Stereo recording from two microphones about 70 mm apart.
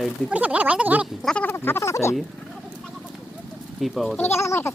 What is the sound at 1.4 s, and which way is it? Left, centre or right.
Speech, left.